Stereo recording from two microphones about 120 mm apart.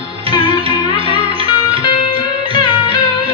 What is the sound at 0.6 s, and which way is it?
Music, 50° right (ahead or behind).